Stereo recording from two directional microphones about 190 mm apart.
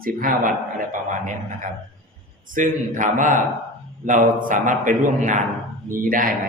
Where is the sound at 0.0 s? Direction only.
45° right (ahead or behind).